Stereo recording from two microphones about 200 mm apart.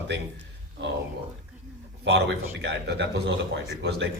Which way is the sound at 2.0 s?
60° right (ahead or behind).